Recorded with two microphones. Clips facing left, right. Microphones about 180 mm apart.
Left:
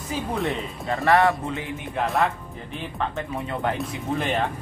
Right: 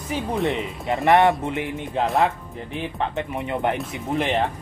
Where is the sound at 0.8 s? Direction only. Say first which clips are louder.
Right 2 dB; 20° right (ahead or behind).